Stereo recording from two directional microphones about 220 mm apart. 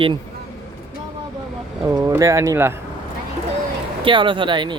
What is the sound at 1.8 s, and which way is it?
Speech, 10° right (ahead or behind).